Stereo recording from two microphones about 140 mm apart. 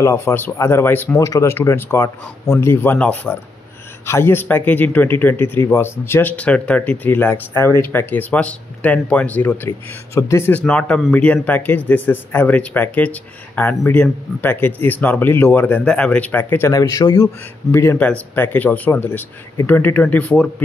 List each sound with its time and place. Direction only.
0.0 s speech: 20° left (ahead or behind)
10.6 s speech: 10° left (ahead or behind)